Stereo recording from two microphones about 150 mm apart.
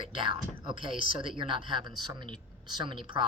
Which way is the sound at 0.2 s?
35° right (ahead or behind).